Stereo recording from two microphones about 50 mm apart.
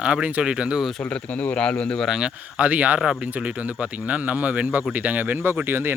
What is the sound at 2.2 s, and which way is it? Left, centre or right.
Speech, right.